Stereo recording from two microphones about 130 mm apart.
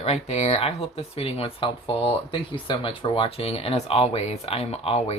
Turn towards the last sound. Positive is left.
turn(degrees=50)  # may be behind; listen again after turning